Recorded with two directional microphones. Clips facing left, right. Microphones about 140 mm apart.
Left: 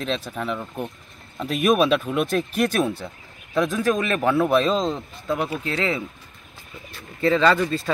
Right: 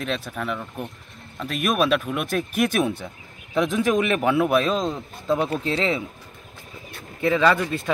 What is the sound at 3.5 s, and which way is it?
Speech, 15° right (ahead or behind).